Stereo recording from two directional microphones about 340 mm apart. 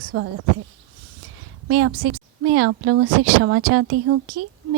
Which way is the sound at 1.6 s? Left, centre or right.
Right.